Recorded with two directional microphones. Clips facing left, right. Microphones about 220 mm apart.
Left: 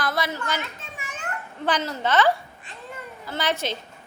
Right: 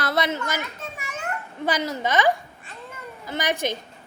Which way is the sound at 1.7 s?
10° right (ahead or behind).